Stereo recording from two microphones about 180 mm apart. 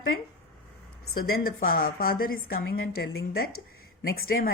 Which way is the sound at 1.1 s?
55° left (ahead or behind).